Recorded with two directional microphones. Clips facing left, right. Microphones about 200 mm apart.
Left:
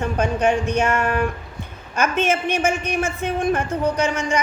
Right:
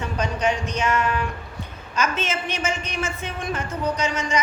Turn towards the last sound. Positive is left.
turn(degrees=55)  # may be behind; listen again after turning